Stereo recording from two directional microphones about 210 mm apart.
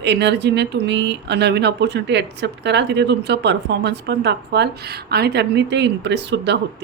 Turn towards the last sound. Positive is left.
turn(degrees=-55)  # may be behind; listen again after turning